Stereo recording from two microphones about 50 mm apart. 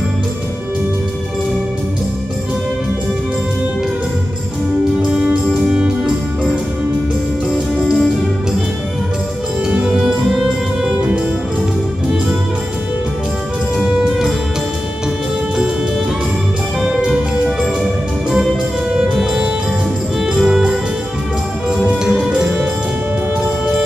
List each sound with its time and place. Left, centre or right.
5.0 s music: centre
7.8 s music: centre
9.7 s music: centre
13.8 s music: centre
17.0 s music: centre
18.9 s music: centre
20.4 s music: centre